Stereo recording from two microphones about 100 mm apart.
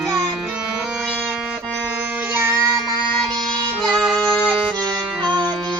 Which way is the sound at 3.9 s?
5° right (ahead or behind).